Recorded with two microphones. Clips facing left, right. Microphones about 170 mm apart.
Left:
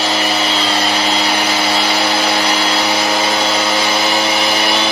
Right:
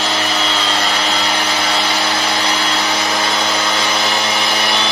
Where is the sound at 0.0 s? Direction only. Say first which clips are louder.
Left 2 dB; 15° left (ahead or behind).